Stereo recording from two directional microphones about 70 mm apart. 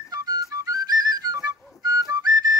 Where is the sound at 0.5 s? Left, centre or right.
Right.